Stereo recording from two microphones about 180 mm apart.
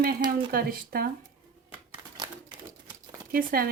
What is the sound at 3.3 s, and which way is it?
Speech, 55° right (ahead or behind).